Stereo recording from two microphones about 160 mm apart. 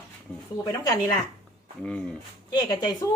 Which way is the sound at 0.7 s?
20° left (ahead or behind).